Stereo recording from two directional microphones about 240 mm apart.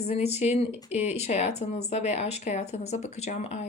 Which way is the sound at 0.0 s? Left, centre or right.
Left.